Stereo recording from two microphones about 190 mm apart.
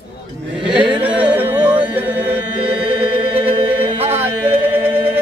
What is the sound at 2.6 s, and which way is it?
Chant, 25° right (ahead or behind).